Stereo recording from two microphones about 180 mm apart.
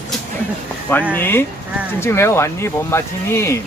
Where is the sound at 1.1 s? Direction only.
10° left (ahead or behind).